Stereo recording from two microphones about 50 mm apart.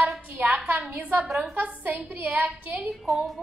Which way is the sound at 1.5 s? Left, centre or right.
Right.